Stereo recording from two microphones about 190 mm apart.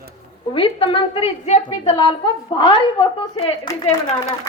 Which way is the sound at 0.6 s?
30° left (ahead or behind).